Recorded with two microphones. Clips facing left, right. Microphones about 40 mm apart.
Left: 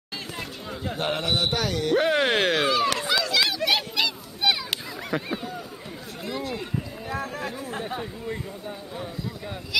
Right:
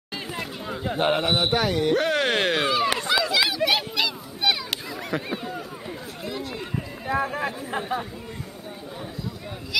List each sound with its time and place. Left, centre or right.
0.4 s speech: centre
2.0 s speech: centre
3.2 s a sound: centre
5.1 s speech: centre
6.2 s run: centre
7.1 s speech: right